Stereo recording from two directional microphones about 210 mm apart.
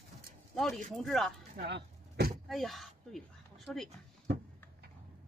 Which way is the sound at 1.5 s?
50° right (ahead or behind).